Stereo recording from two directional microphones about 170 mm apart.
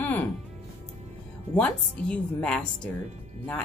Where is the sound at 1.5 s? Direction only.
10° left (ahead or behind).